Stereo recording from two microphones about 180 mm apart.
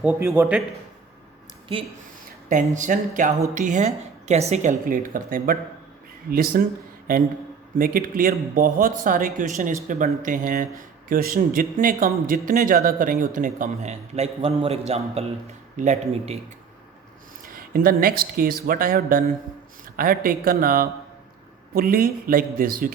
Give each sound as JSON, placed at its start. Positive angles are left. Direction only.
{"t": 0.2, "sound": "a man's voice", "side_deg": -10}
{"t": 2.5, "sound": "a man's voice", "side_deg": -45}
{"t": 17.4, "sound": "a sound", "side_deg": -55}
{"t": 18.0, "sound": "a man's voice", "side_deg": -55}